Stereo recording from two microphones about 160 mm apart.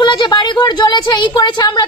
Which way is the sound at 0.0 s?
30° left (ahead or behind).